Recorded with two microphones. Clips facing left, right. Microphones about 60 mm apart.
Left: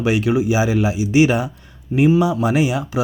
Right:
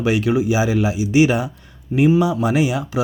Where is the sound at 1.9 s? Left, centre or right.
Centre.